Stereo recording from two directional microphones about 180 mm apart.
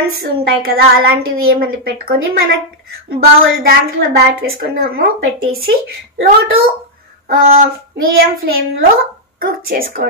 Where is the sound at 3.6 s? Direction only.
60° right (ahead or behind).